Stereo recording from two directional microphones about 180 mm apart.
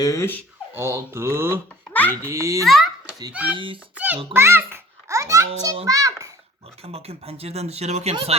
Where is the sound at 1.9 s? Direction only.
10° left (ahead or behind).